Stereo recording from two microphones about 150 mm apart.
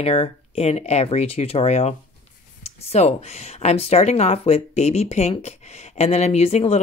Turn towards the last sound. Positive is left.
turn(degrees=45)  # may be behind; listen again after turning